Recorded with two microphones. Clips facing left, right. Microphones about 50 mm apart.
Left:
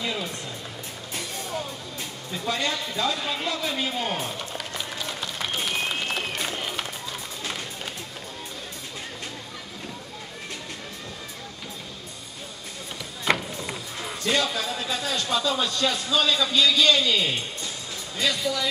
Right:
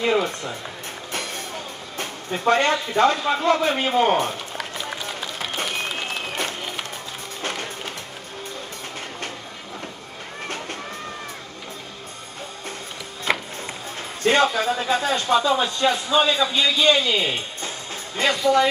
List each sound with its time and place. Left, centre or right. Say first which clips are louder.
0.0 s music: right 9 dB; right
2.0 s a man's voice: right 9 dB; right
4.9 s run: right 2 dB; centre
5.7 s applause: even; centre
13.3 s chop: even; centre
14.2 s speech: right 7 dB; right
18.1 s speech: right 8 dB; right